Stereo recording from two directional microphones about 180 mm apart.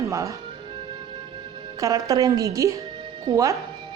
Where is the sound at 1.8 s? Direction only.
20° right (ahead or behind).